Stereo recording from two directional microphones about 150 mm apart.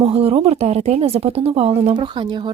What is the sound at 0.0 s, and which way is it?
A woman's voice, 40° right (ahead or behind).